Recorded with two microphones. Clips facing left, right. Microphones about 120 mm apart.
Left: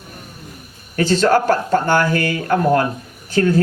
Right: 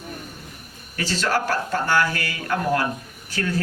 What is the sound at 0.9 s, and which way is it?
Speech, 50° left (ahead or behind).